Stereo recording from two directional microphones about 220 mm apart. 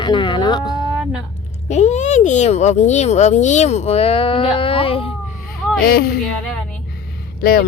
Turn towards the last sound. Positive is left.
turn(degrees=40)  # may be behind; listen again after turning